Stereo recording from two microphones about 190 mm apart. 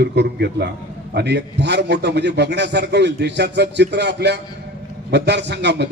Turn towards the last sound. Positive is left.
turn(degrees=-60)  # may be behind; listen again after turning